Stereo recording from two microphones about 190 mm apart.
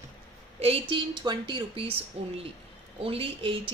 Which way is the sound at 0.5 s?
30° right (ahead or behind).